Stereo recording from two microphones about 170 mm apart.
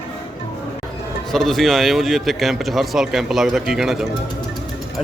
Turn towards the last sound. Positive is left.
turn(degrees=0)  # may be behind; listen again after turning